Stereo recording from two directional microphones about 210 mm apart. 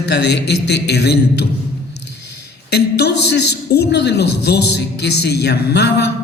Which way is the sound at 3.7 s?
50° left (ahead or behind).